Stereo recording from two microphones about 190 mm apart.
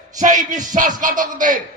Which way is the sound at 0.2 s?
40° right (ahead or behind).